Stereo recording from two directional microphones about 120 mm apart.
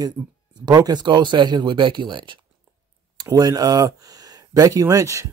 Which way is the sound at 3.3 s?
30° right (ahead or behind).